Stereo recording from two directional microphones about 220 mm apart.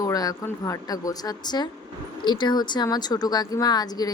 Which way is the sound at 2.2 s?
20° left (ahead or behind).